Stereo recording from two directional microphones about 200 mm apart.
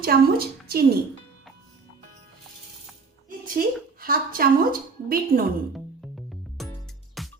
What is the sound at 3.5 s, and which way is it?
A woman's voice, 45° right (ahead or behind).